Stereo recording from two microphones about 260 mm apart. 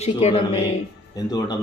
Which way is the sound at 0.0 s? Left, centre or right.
Left.